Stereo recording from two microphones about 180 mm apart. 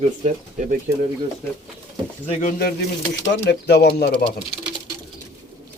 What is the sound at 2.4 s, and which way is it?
Speech, 55° left (ahead or behind).